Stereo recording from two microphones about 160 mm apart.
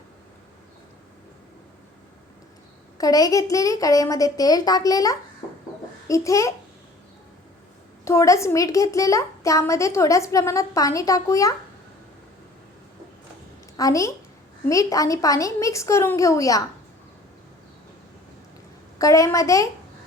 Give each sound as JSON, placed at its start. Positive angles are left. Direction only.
{"t": 3.0, "sound": "a woman's voice", "side_deg": 20}
{"t": 8.0, "sound": "a woman's voice", "side_deg": 20}
{"t": 13.7, "sound": "a woman's voice", "side_deg": 20}
{"t": 18.9, "sound": "a woman's voice", "side_deg": 20}